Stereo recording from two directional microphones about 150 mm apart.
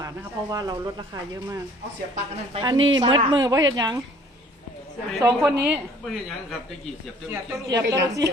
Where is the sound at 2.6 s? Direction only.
30° right (ahead or behind).